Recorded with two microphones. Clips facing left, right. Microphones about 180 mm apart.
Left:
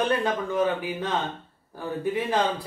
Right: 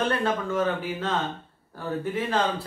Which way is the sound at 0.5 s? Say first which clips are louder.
Left 1 dB; 15° left (ahead or behind).